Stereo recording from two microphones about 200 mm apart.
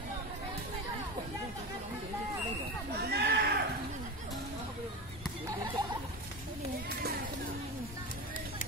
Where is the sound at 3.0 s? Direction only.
55° right (ahead or behind).